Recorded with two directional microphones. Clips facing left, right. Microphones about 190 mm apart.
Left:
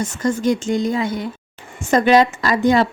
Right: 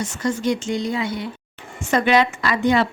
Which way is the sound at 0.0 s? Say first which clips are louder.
Left 3 dB; 50° left (ahead or behind).